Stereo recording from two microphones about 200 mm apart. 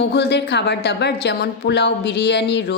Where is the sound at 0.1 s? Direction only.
55° left (ahead or behind).